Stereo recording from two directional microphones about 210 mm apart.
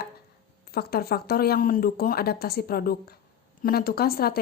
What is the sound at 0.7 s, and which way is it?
Speech, 45° left (ahead or behind).